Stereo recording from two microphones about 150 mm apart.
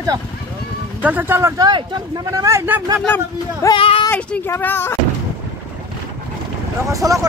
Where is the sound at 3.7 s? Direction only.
35° left (ahead or behind).